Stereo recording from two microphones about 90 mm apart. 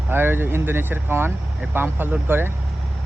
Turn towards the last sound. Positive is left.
turn(degrees=-25)  # may be behind; listen again after turning